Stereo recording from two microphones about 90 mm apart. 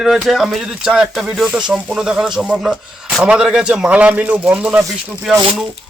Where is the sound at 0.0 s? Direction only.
Centre (ahead or behind).